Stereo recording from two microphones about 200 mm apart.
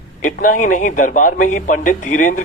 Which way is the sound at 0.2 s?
40° left (ahead or behind).